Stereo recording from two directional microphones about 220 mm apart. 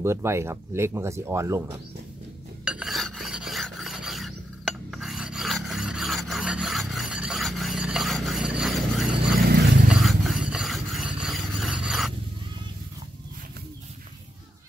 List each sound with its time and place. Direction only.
0.0 s speech: 10° right (ahead or behind)
2.6 s filing: centre (ahead or behind)
9.4 s a sound: 50° right (ahead or behind)
9.8 s scrape: centre (ahead or behind)